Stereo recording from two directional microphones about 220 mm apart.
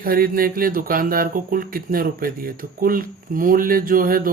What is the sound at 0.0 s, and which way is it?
Speech, 40° right (ahead or behind).